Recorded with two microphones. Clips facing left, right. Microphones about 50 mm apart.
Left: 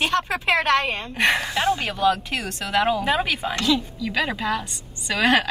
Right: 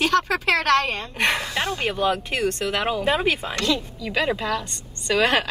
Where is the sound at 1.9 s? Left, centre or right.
Centre.